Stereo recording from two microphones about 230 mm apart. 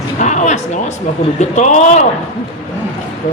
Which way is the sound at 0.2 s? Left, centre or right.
Left.